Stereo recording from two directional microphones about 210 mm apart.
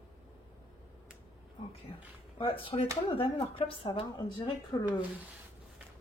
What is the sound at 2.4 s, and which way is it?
A woman's voice, 25° left (ahead or behind).